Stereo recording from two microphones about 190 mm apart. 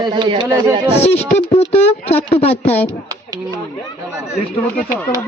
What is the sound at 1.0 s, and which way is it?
Speech, 35° left (ahead or behind).